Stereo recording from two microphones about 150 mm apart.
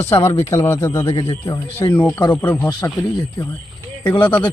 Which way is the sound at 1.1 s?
40° left (ahead or behind).